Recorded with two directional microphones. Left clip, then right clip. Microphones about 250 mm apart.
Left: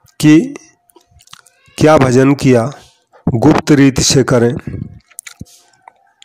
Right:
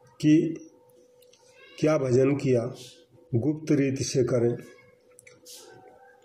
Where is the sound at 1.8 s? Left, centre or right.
Left.